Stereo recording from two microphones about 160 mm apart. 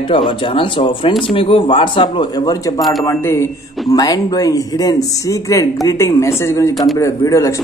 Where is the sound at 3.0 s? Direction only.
15° left (ahead or behind).